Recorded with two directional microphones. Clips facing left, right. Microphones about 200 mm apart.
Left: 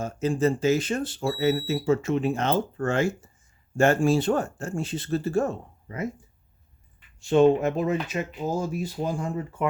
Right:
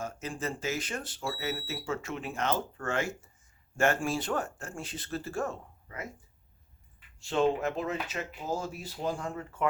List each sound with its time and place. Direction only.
0.0 s speech: 30° left (ahead or behind)
7.2 s speech: 20° left (ahead or behind)